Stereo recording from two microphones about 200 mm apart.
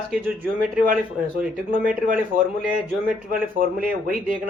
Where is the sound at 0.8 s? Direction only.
45° right (ahead or behind).